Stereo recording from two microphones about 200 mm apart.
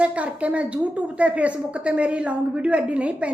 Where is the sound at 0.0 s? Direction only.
5° right (ahead or behind).